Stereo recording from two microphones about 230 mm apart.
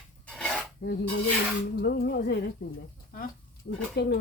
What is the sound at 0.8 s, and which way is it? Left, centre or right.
Filing, left.